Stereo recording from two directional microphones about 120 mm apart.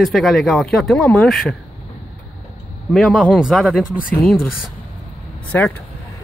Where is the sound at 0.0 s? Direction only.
Centre (ahead or behind).